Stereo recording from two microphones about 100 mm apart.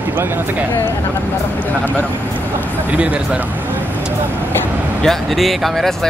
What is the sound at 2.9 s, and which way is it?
Speech, 15° right (ahead or behind).